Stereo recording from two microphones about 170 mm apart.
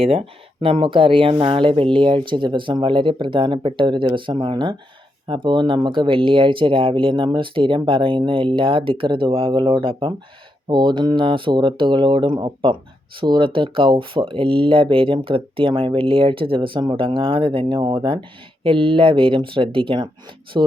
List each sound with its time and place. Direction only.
0.0 s speech: 35° right (ahead or behind)